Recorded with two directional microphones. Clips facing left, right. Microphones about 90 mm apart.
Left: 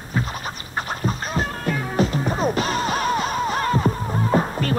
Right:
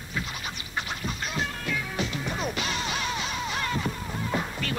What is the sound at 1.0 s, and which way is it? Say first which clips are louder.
Music: left 7 dB; 40° left (ahead or behind).